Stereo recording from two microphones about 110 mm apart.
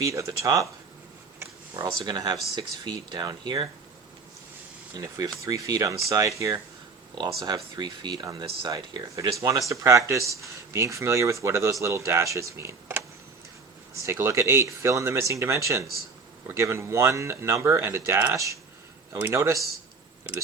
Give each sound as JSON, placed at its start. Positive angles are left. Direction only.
{"t": 0.0, "sound": "speech", "side_deg": -30}
{"t": 1.8, "sound": "speech", "side_deg": -35}
{"t": 4.9, "sound": "speech", "side_deg": -35}
{"t": 7.4, "sound": "speech", "side_deg": -40}